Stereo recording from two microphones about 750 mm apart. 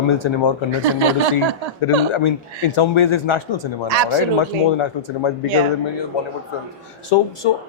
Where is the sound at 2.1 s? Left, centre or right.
Left.